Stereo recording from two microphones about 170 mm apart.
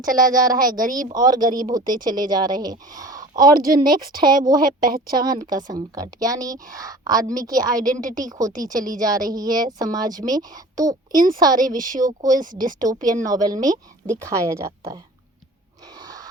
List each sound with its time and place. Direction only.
0.1 s speech: 55° right (ahead or behind)
1.0 s a woman's voice: 25° right (ahead or behind)
7.9 s speech: 50° right (ahead or behind)
8.2 s a woman's voice: 20° right (ahead or behind)
12.3 s speech: 50° right (ahead or behind)
13.3 s a woman's voice: 20° right (ahead or behind)
16.0 s a sound: 25° right (ahead or behind)